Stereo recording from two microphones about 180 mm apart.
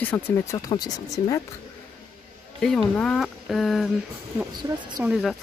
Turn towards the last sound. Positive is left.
turn(degrees=-5)  # may be behind; listen again after turning